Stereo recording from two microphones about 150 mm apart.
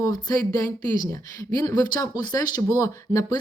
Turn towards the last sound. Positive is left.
turn(degrees=25)  # may be behind; listen again after turning